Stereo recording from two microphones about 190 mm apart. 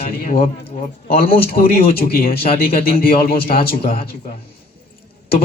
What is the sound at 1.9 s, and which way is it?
Speech, 55° left (ahead or behind).